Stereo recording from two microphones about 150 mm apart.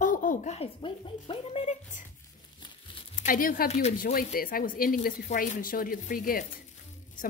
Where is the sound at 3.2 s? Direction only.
65° left (ahead or behind).